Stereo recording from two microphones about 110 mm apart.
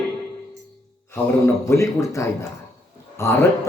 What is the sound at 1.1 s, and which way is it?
A man's voice, 20° left (ahead or behind).